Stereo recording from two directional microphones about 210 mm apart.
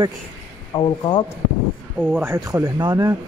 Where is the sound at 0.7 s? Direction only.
25° left (ahead or behind).